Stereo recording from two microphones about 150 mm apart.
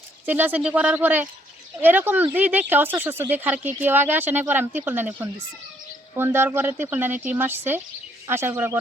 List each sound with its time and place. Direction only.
0.3 s speech: 10° right (ahead or behind)